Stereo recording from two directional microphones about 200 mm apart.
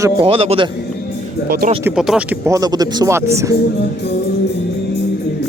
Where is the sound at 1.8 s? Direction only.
5° right (ahead or behind).